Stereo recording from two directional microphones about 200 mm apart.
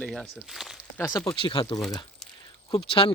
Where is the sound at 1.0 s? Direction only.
20° left (ahead or behind).